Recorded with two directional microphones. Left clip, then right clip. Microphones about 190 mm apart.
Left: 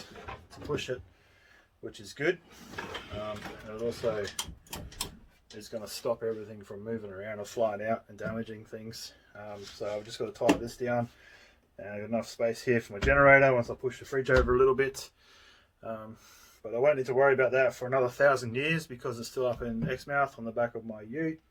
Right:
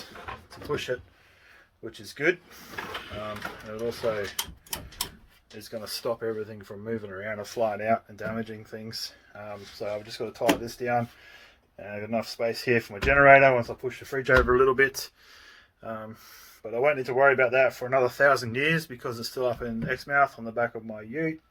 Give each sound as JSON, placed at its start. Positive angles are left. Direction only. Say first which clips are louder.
{"t": 0.7, "sound": "speech", "louder": "right 4 dB", "side_deg": -20}
{"t": 5.5, "sound": "speech", "louder": "right 4 dB", "side_deg": -20}